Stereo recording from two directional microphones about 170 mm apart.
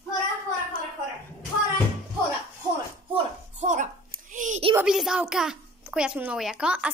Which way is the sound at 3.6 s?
45° right (ahead or behind).